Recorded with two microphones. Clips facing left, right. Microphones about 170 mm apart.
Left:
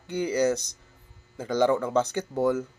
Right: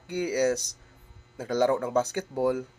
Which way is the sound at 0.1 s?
10° right (ahead or behind).